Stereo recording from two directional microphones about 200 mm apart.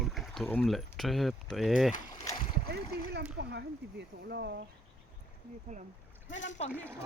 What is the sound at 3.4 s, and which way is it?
Speech, 55° right (ahead or behind).